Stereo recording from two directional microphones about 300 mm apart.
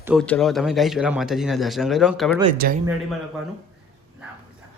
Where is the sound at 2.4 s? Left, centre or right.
Right.